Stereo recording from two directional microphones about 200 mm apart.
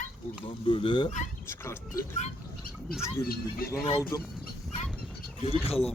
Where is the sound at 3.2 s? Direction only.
50° left (ahead or behind).